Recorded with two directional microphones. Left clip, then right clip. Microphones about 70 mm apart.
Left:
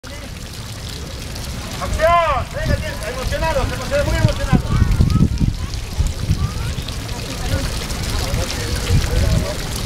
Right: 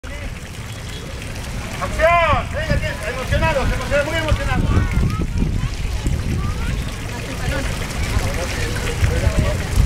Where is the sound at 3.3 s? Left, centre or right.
Centre.